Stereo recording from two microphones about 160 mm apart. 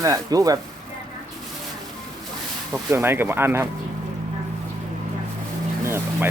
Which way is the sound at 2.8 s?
15° right (ahead or behind).